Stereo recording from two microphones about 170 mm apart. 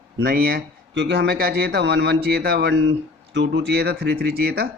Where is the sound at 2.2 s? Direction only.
65° right (ahead or behind).